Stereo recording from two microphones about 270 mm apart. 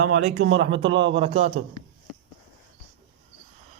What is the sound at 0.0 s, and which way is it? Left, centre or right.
Speech, right.